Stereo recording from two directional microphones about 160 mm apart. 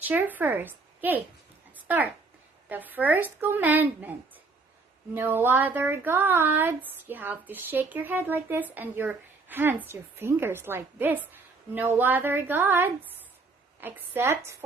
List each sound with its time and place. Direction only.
0.0 s a woman's voice: 10° right (ahead or behind)
5.1 s speech: 15° right (ahead or behind)